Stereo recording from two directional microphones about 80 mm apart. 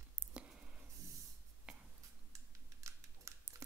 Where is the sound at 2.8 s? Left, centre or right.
Right.